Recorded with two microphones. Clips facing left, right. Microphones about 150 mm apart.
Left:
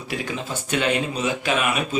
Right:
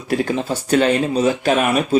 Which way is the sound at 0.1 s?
40° right (ahead or behind).